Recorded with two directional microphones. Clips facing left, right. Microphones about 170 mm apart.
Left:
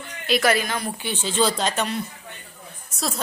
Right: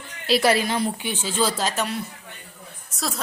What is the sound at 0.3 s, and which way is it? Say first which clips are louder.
Speech: right 1 dB; 30° right (ahead or behind).